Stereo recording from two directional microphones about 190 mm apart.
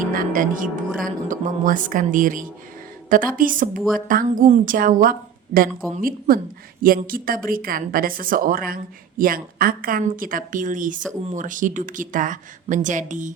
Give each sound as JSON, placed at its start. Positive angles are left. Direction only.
{"t": 0.0, "sound": "a woman's voice", "side_deg": -45}